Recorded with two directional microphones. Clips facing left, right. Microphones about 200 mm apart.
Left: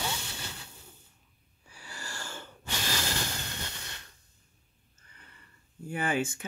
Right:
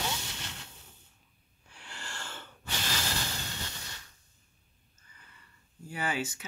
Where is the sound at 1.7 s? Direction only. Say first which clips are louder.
Left 2 dB; 10° left (ahead or behind).